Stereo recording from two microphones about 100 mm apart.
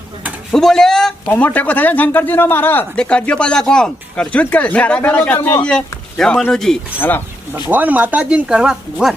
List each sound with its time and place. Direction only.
0.5 s speech: 5° left (ahead or behind)
1.3 s a man's voice: 20° left (ahead or behind)
5.6 s speech: 10° left (ahead or behind)
7.7 s speech: 15° right (ahead or behind)